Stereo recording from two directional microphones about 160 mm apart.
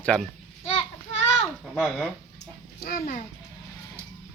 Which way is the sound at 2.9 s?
60° left (ahead or behind).